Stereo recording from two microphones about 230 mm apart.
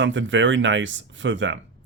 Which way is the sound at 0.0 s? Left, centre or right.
Right.